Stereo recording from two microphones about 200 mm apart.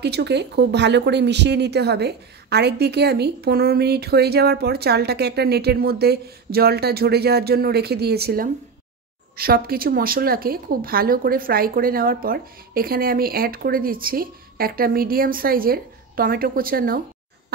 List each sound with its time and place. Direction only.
0.0 s speech: 55° right (ahead or behind)